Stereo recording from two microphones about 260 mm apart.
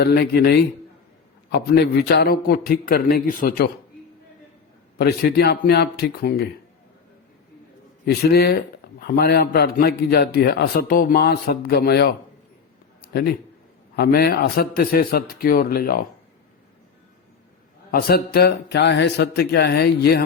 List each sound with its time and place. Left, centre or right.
0.0 s speech: left
4.9 s speech: left
8.0 s speech: left
13.9 s speech: left
17.9 s speech: left